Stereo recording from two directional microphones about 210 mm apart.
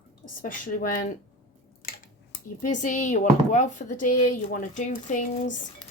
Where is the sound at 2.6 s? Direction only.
35° left (ahead or behind).